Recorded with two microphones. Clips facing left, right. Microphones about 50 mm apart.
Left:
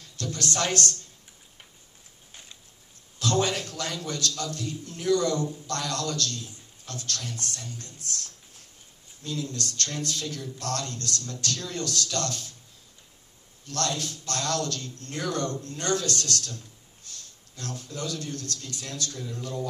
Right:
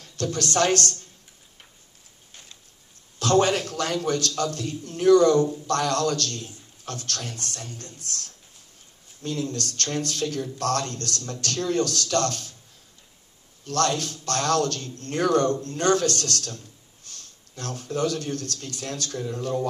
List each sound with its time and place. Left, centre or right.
0.0 s speech: right
3.2 s a sound: right
4.4 s a man's voice: right
13.7 s a man's voice: right